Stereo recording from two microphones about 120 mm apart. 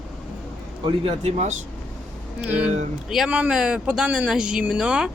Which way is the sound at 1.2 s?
75° right (ahead or behind).